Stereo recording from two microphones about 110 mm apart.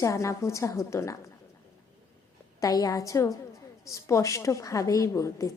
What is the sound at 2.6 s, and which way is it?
A woman's voice, 30° left (ahead or behind).